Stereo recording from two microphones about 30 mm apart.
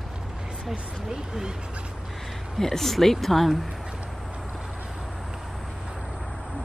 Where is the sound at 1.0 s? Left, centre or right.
Centre.